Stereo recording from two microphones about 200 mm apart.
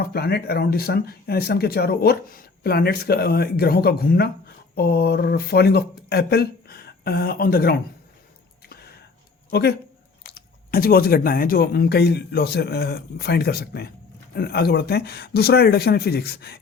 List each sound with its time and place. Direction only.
0.0 s speech: 50° left (ahead or behind)
8.7 s a sound: 50° left (ahead or behind)
9.5 s speech: 55° left (ahead or behind)